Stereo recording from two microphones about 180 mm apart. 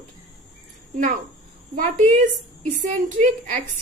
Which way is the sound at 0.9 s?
45° right (ahead or behind).